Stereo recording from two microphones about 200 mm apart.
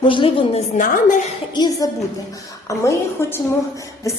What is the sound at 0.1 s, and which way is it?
Speech, 25° left (ahead or behind).